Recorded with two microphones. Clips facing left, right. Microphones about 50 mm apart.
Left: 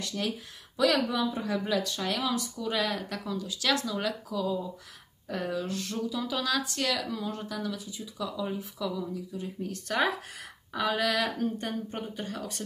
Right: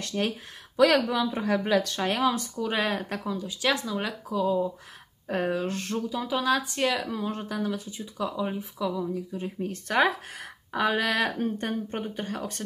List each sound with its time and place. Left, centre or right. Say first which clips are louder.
0.0 s speech: right 4 dB; right
5.3 s speech: right 5 dB; right
6.2 s speech: right 7 dB; right
8.5 s speech: right 3 dB; right